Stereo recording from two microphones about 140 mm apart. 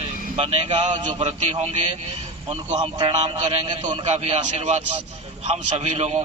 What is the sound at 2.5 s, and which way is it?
A man's voice, 40° right (ahead or behind).